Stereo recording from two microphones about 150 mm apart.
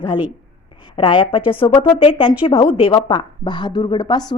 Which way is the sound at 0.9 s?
35° left (ahead or behind).